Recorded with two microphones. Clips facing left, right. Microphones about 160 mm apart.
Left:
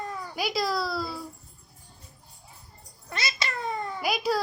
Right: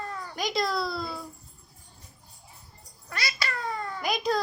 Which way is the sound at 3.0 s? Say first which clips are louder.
Left 1 dB; 25° left (ahead or behind).